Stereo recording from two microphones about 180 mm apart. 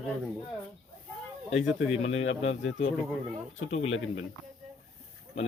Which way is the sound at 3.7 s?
90° left.